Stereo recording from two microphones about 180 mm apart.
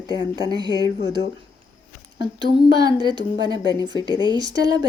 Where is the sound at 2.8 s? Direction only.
25° right (ahead or behind).